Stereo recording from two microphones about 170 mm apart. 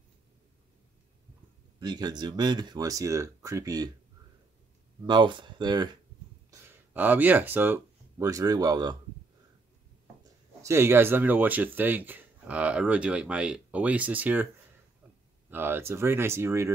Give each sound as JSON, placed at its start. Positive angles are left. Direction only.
{"t": 1.8, "sound": "speech", "side_deg": -25}
{"t": 5.0, "sound": "speech", "side_deg": -25}
{"t": 6.5, "sound": "speech", "side_deg": -10}
{"t": 10.6, "sound": "speech", "side_deg": -15}
{"t": 15.5, "sound": "speech", "side_deg": -10}